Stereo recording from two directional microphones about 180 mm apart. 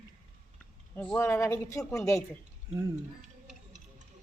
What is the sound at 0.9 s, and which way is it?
Speech, 10° left (ahead or behind).